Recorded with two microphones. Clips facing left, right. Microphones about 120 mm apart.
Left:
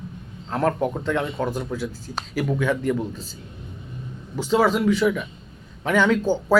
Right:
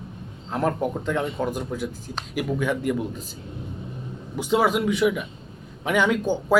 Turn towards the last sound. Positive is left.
turn(degrees=-15)  # may be behind; listen again after turning